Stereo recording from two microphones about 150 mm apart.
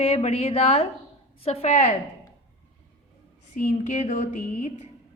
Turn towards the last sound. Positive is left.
turn(degrees=60)  # may be behind; listen again after turning